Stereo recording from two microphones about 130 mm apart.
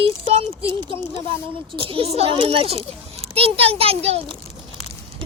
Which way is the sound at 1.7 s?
45° right (ahead or behind).